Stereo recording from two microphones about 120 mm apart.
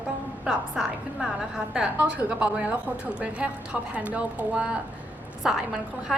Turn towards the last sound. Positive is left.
turn(degrees=-5)  # may be behind; listen again after turning